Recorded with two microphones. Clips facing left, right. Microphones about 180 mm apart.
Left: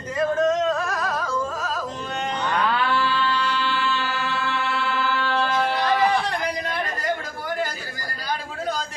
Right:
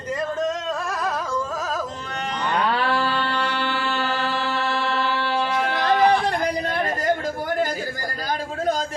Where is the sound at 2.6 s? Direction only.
35° right (ahead or behind).